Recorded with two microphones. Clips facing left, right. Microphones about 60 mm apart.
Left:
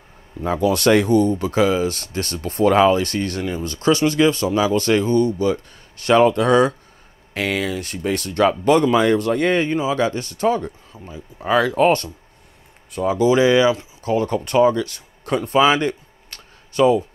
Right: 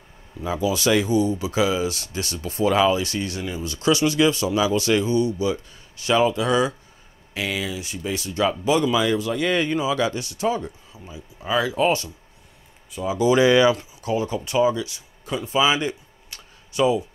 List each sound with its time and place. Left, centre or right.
0.4 s speech: left
13.3 s speech: left
14.0 s speech: left